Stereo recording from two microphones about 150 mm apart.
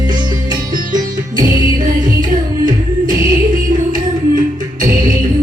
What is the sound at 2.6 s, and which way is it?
Music, 65° right (ahead or behind).